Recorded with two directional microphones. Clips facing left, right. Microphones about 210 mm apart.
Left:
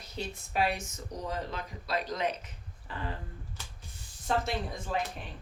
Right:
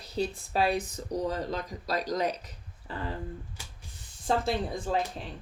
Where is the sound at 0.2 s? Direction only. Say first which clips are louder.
Right 4 dB; 35° right (ahead or behind).